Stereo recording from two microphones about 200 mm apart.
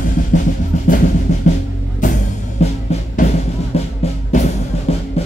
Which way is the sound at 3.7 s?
30° left (ahead or behind).